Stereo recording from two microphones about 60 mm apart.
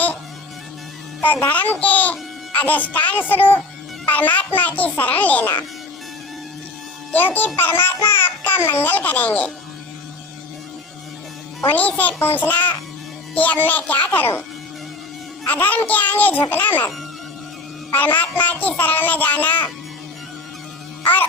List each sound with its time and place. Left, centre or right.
1.2 s a child's voice: left
7.1 s a child's voice: left
8.9 s speech: left
11.7 s speech: left
15.4 s speech: left
17.9 s speech: left